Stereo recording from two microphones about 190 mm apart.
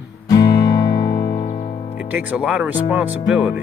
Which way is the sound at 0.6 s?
25° left (ahead or behind).